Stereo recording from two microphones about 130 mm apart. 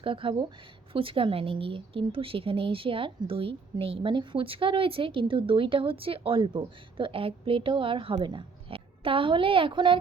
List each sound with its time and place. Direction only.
0.0 s a woman's voice: 40° right (ahead or behind)